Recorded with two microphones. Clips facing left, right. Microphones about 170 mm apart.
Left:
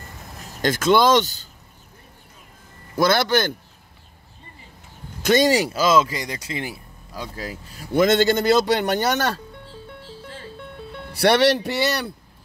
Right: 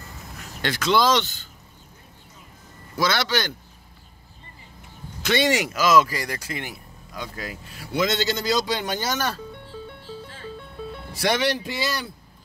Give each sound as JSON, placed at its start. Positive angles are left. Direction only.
{"t": 0.4, "sound": "speech", "side_deg": 45}
{"t": 3.0, "sound": "speech", "side_deg": 55}
{"t": 5.2, "sound": "speech", "side_deg": 40}
{"t": 7.9, "sound": "speech", "side_deg": 50}
{"t": 11.1, "sound": "speech", "side_deg": 65}